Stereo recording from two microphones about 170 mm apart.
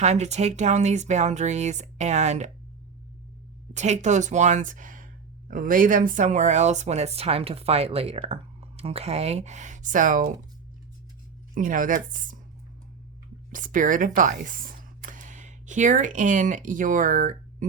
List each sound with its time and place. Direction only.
0.0 s speech: 40° right (ahead or behind)
3.8 s speech: 45° right (ahead or behind)
11.5 s speech: 50° right (ahead or behind)
13.5 s speech: 50° right (ahead or behind)